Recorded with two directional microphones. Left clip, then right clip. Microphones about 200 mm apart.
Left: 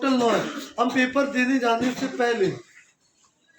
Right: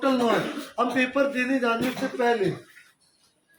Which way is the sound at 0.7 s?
30° left (ahead or behind).